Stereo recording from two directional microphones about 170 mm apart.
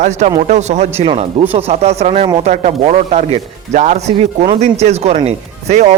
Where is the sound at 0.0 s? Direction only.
45° right (ahead or behind).